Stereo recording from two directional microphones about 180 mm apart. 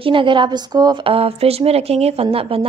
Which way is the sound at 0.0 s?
30° right (ahead or behind).